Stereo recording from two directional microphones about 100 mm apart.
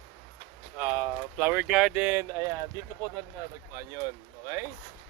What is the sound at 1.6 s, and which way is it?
Speech, 5° right (ahead or behind).